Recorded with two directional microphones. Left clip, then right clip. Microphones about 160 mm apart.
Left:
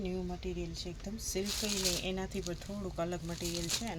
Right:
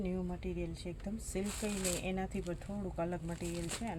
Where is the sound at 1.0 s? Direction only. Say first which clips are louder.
Left 3 dB; 25° right (ahead or behind).